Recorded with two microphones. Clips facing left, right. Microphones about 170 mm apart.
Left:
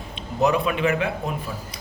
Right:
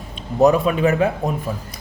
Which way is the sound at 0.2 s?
45° right (ahead or behind).